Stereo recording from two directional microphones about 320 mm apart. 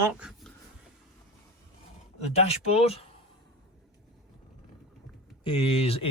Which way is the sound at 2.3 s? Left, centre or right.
Centre.